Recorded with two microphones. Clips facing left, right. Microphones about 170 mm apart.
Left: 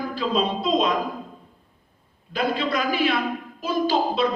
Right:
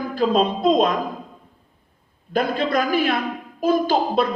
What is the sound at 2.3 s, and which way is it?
A man's voice, 50° right (ahead or behind).